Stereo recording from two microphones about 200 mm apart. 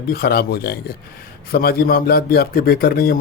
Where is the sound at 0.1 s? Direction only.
50° left (ahead or behind).